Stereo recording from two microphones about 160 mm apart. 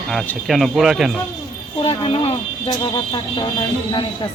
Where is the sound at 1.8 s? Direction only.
35° left (ahead or behind).